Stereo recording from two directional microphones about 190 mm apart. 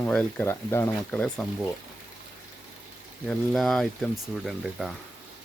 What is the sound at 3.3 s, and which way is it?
Speech, centre (ahead or behind).